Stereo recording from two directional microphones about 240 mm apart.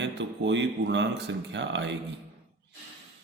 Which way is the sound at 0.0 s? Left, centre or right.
Right.